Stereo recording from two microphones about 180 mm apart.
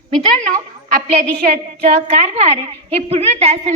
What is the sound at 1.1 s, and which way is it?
A woman's voice, 35° right (ahead or behind).